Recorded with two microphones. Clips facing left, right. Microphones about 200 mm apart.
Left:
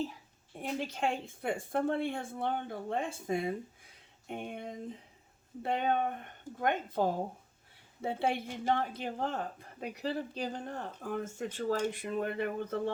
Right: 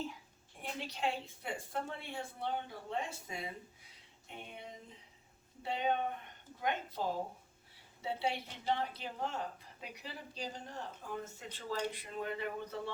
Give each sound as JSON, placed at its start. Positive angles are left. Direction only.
{"t": 0.6, "sound": "speech", "side_deg": 50}